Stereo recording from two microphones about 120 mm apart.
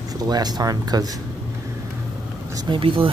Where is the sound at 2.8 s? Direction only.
45° right (ahead or behind).